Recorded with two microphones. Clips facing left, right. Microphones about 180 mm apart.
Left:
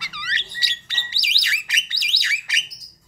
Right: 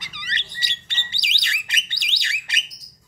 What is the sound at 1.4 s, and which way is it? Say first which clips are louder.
Alarm: left 1 dB; 25° right (ahead or behind).